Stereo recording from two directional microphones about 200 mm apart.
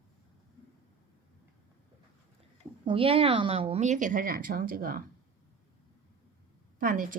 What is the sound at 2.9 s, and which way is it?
Speech, 25° right (ahead or behind).